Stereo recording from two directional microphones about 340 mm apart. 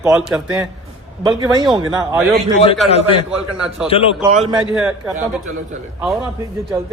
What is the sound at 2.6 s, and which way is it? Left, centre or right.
A man's voice, centre.